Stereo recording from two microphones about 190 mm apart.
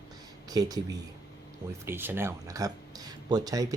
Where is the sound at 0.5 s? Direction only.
20° right (ahead or behind).